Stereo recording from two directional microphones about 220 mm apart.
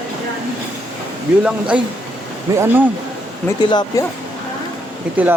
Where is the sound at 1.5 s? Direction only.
5° right (ahead or behind).